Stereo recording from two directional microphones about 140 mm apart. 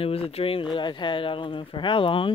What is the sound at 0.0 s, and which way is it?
Speech, 45° left (ahead or behind).